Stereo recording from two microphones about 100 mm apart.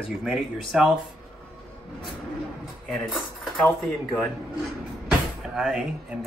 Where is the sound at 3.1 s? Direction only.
5° left (ahead or behind).